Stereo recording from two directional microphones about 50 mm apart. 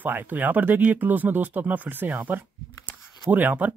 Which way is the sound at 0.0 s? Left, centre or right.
Right.